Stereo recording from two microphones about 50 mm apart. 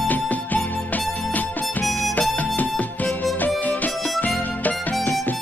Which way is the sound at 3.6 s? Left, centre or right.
Left.